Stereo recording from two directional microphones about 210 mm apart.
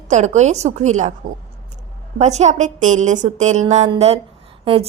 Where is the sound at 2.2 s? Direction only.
30° right (ahead or behind).